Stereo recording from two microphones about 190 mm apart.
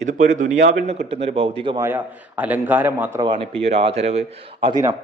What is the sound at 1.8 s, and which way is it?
A man's voice, 10° right (ahead or behind).